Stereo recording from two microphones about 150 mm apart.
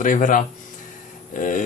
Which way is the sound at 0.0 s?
60° left (ahead or behind).